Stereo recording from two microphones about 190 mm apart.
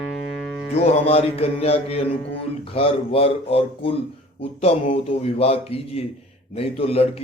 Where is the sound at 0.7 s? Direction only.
30° left (ahead or behind).